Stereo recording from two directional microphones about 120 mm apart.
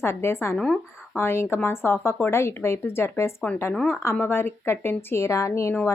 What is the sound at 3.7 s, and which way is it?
Speech, centre (ahead or behind).